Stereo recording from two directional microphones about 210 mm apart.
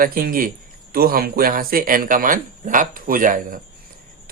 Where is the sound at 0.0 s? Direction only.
45° right (ahead or behind).